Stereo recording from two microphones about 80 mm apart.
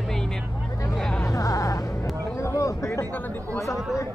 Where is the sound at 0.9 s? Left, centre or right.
Centre.